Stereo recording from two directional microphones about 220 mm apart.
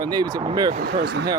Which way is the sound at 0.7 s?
50° right (ahead or behind).